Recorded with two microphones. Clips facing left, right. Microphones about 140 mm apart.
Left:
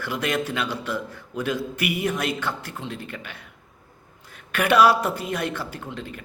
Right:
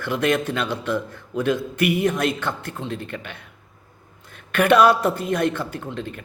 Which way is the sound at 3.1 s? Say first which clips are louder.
Right 4 dB; 5° left (ahead or behind).